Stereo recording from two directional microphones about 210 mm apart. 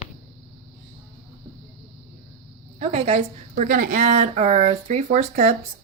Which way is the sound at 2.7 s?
30° right (ahead or behind).